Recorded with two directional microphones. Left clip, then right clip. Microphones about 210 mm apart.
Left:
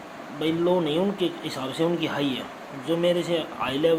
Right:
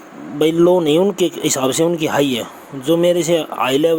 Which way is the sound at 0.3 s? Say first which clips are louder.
Right 10 dB; 55° right (ahead or behind).